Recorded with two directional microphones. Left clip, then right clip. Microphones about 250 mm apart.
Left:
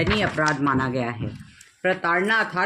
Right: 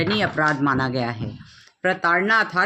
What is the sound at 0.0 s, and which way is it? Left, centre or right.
Speech, right.